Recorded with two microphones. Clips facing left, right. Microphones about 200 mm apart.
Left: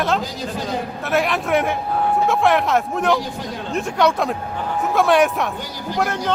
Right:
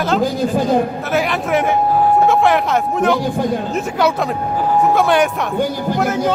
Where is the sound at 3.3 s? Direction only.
50° right (ahead or behind).